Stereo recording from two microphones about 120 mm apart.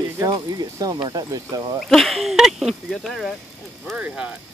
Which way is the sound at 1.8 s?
Centre (ahead or behind).